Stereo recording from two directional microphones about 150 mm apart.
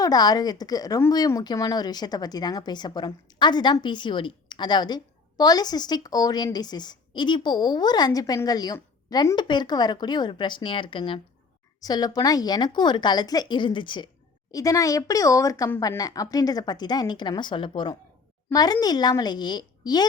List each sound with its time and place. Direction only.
0.0 s a woman's voice: 25° left (ahead or behind)